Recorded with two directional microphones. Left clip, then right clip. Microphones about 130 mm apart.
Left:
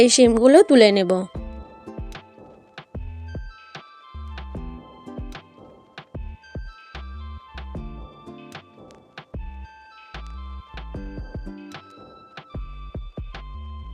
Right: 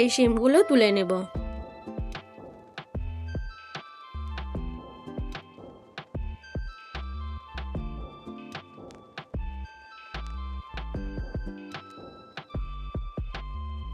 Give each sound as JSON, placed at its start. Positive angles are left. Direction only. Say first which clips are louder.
{"t": 0.0, "sound": "a woman's voice", "louder": "left 8 dB", "side_deg": 40}
{"t": 1.3, "sound": "music", "louder": "even", "side_deg": 0}
{"t": 10.8, "sound": "music", "louder": "left 1 dB", "side_deg": 0}